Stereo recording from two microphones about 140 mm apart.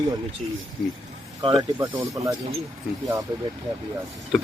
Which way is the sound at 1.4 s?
25° right (ahead or behind).